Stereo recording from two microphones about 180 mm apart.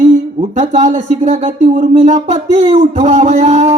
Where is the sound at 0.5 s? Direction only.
40° right (ahead or behind).